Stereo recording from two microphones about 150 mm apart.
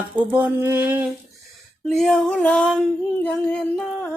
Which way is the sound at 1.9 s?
5° left (ahead or behind).